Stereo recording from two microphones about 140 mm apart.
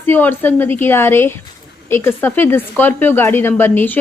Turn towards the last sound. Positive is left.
turn(degrees=15)  # may be behind; listen again after turning